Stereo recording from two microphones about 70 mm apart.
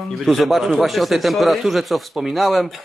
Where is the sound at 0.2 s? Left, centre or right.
Centre.